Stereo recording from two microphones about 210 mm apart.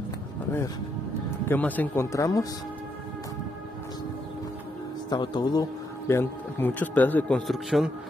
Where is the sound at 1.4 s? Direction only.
10° left (ahead or behind).